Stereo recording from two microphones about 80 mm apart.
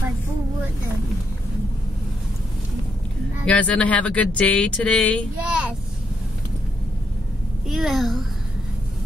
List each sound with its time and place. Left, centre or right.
3.4 s speech: centre
5.4 s vehicle: centre
7.6 s a child's voice: centre